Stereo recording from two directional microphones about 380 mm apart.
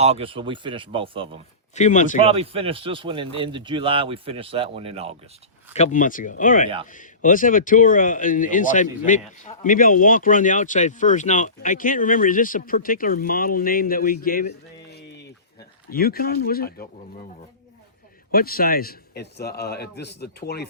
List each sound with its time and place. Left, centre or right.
0.0 s speech: centre
1.7 s speech: centre
2.2 s speech: centre
5.7 s speech: centre
18.3 s speech: left